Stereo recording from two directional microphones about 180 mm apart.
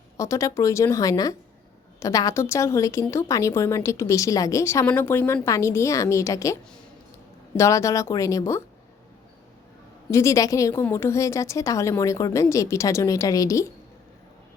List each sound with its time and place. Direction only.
0.2 s a woman's voice: 15° left (ahead or behind)
10.1 s a woman's voice: 15° left (ahead or behind)